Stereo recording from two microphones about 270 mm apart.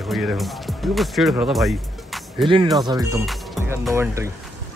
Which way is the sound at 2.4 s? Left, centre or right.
Centre.